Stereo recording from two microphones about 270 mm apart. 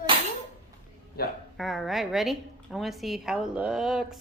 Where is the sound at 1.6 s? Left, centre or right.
Centre.